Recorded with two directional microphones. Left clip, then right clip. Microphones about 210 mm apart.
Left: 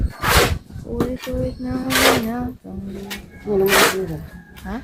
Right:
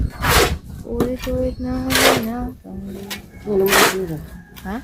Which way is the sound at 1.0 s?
45° right (ahead or behind).